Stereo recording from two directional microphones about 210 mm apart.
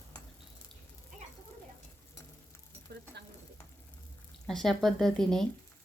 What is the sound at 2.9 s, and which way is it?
Stir, 55° right (ahead or behind).